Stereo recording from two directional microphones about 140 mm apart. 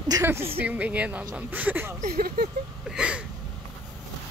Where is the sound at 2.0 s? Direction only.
90° right.